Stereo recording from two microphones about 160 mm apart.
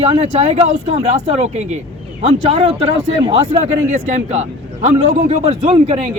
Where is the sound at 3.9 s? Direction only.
50° right (ahead or behind).